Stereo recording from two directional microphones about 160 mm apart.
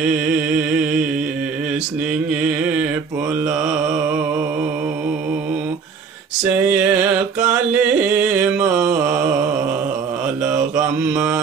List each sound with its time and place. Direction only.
2.6 s mantra: 10° right (ahead or behind)
6.4 s a sound: 10° right (ahead or behind)
7.4 s music: 10° right (ahead or behind)